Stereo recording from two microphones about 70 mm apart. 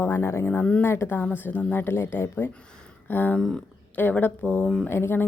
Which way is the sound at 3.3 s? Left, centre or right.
Centre.